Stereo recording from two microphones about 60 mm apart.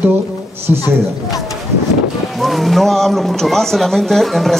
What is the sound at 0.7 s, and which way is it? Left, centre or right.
Speech, right.